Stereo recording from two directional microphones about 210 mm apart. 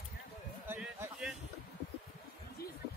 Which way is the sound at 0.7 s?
5° right (ahead or behind).